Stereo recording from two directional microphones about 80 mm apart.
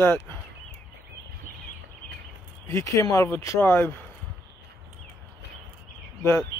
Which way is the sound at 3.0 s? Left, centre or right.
Left.